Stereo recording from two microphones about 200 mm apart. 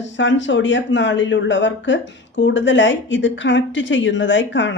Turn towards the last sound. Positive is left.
turn(degrees=65)  # may be behind; listen again after turning